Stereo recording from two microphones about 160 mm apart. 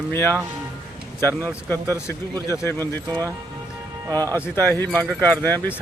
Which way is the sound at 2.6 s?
15° left (ahead or behind).